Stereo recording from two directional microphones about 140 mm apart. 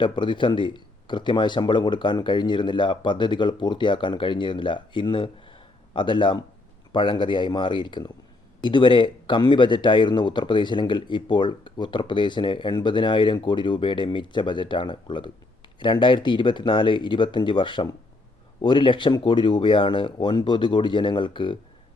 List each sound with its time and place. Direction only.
0.0 s speech: 35° left (ahead or behind)